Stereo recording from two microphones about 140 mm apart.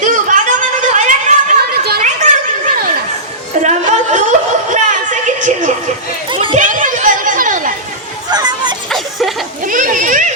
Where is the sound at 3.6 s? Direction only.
60° right (ahead or behind).